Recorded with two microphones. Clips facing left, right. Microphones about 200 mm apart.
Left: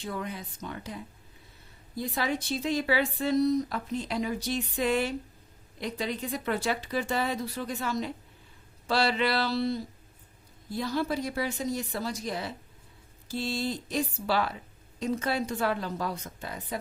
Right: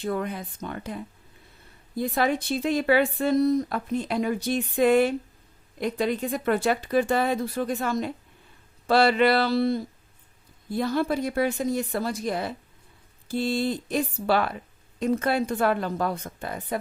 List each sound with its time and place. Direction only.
0.0 s a woman's voice: 55° right (ahead or behind)